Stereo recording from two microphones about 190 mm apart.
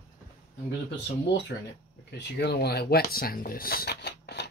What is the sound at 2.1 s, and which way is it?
Speech, 60° left (ahead or behind).